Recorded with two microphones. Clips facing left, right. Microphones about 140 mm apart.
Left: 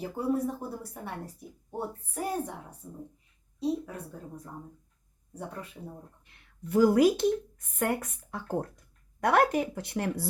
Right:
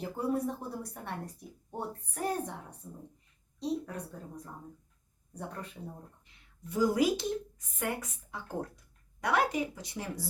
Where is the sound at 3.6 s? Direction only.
5° left (ahead or behind).